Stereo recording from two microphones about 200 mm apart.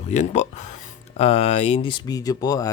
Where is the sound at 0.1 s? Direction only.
35° left (ahead or behind).